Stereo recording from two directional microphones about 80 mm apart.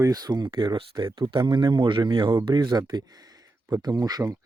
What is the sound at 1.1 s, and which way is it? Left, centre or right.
A man's voice, right.